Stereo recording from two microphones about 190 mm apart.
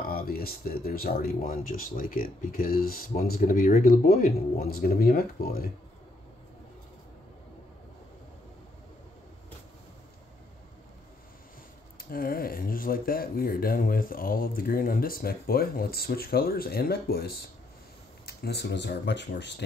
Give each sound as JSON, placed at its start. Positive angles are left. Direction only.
{"t": 0.1, "sound": "speech", "side_deg": 50}
{"t": 12.1, "sound": "speech", "side_deg": 50}